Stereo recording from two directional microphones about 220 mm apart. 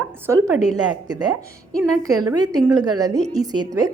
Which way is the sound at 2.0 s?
15° right (ahead or behind).